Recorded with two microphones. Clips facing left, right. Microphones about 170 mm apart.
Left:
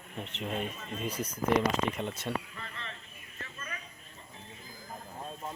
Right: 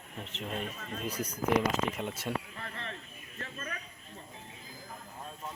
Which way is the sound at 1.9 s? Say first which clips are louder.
Left 1 dB; 5° right (ahead or behind).